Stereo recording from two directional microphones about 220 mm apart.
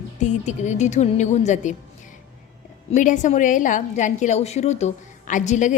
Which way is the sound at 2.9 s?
35° left (ahead or behind).